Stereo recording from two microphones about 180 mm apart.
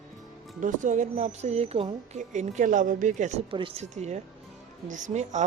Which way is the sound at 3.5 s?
30° right (ahead or behind).